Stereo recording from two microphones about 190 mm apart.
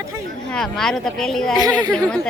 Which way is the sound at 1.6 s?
20° right (ahead or behind).